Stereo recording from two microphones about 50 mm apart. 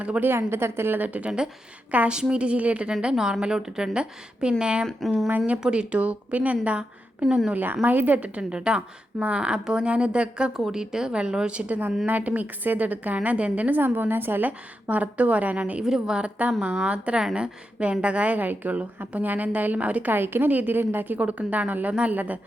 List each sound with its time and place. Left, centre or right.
0.2 s a woman's voice: right
0.9 s a woman's voice: right
2.0 s a woman's voice: centre
3.0 s a woman's voice: centre
4.9 s speech: centre
5.5 s a woman's voice: centre
7.5 s a woman's voice: right
8.2 s a woman's voice: centre
10.5 s a woman's voice: centre; by 13.7 s right
13.7 s a woman's voice: right
14.8 s a woman's voice: right
15.8 s a woman's voice: centre
16.2 s a woman's voice: right
20.1 s a woman's voice: right